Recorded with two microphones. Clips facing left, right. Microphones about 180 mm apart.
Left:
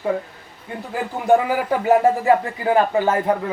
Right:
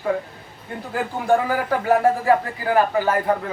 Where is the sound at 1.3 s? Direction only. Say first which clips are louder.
Left 3 dB; 15° left (ahead or behind).